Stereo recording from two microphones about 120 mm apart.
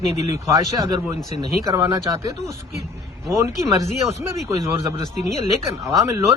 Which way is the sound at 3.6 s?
30° right (ahead or behind).